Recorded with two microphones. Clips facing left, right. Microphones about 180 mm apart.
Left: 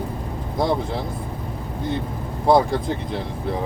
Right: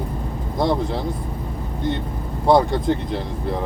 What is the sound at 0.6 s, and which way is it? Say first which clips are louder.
Speech: right 1 dB; centre (ahead or behind).